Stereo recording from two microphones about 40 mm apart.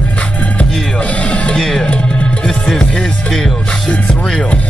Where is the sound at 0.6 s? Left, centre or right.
Left.